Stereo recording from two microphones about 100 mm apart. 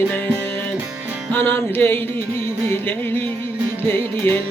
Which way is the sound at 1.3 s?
20° left (ahead or behind).